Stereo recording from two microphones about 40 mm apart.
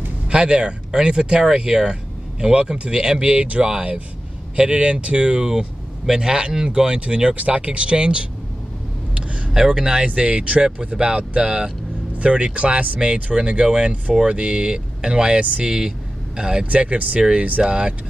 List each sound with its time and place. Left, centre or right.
0.3 s speech: right
3.3 s speech: right
3.6 s speech: centre
9.8 s speech: right
12.2 s speech: right
15.6 s speech: centre
16.6 s speech: right